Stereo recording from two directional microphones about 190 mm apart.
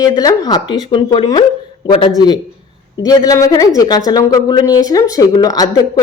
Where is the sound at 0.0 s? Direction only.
20° left (ahead or behind).